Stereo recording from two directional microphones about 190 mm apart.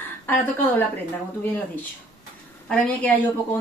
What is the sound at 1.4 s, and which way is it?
A woman's voice, 10° left (ahead or behind).